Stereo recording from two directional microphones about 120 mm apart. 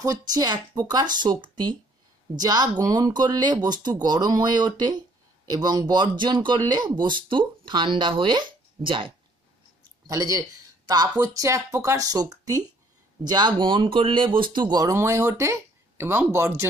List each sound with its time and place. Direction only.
0.3 s speech: 35° right (ahead or behind)
10.0 s speech: 30° right (ahead or behind)